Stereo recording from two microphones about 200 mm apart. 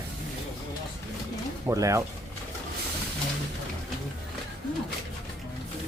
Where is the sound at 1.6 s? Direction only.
15° right (ahead or behind).